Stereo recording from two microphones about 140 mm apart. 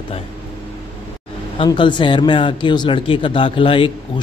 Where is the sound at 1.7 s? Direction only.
35° left (ahead or behind).